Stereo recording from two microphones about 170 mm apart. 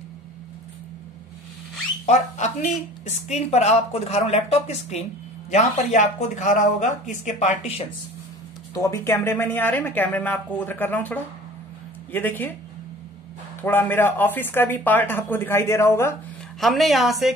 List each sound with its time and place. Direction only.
2.0 s speech: 45° left (ahead or behind)
8.7 s speech: 15° left (ahead or behind)
13.6 s speech: 10° left (ahead or behind)
16.5 s a woman's voice: centre (ahead or behind)